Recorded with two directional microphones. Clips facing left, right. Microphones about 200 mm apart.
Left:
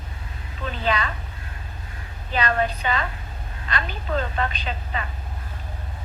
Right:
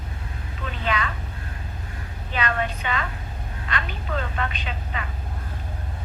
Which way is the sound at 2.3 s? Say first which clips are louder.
Left 3 dB; 35° left (ahead or behind).